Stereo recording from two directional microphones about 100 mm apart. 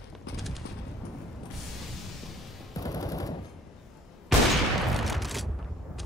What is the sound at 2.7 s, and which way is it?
Machine gun, 35° left (ahead or behind).